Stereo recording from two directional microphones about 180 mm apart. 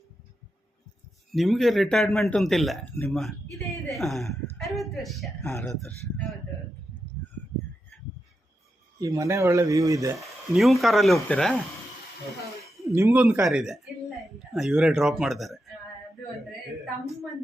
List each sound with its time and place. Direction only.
1.3 s a man's voice: centre (ahead or behind)
5.4 s a man's voice: 15° left (ahead or behind)
9.0 s speech: 20° right (ahead or behind)
10.2 s a man's voice: centre (ahead or behind)
12.8 s speech: 15° right (ahead or behind)